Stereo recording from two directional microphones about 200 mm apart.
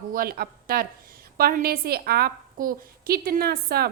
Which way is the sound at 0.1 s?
50° right (ahead or behind).